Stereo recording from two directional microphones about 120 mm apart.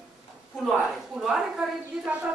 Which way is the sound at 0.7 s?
Centre (ahead or behind).